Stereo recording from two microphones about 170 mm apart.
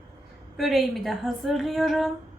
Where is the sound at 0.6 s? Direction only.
Centre (ahead or behind).